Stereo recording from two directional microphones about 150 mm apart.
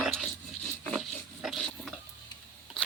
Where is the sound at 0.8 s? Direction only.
Centre (ahead or behind).